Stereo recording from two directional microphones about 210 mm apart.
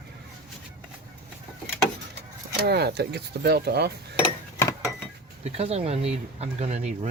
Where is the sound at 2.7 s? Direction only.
50° right (ahead or behind).